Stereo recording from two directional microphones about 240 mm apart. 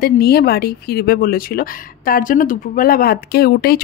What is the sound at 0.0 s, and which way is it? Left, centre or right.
Speech, left.